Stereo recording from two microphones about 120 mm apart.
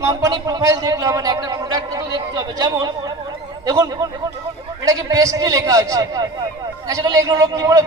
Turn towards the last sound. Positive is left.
turn(degrees=-25)  # may be behind; listen again after turning